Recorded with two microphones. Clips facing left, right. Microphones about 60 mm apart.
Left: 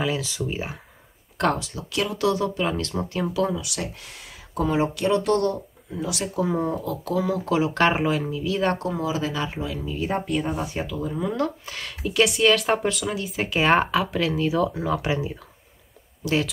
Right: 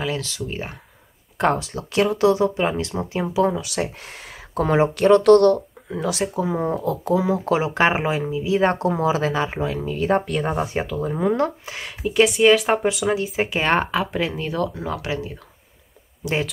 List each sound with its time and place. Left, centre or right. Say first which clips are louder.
0.0 s speech: even; centre
1.5 s speech: right 3 dB; right
3.4 s speech: right 5 dB; right
6.2 s speech: left 2 dB; centre
6.6 s speech: right 4 dB; right
7.7 s speech: right 1 dB; centre; by 9.8 s right
10.0 s speech: right 5 dB; right
10.4 s speech: right 4 dB; right
11.6 s speech: right 3 dB; centre
13.0 s speech: right 6 dB; right
13.5 s speech: left 3 dB; centre
15.0 s speech: left 1 dB; left